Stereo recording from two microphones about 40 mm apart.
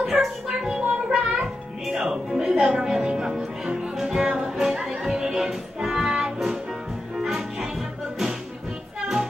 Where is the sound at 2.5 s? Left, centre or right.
Right; by 7.7 s centre.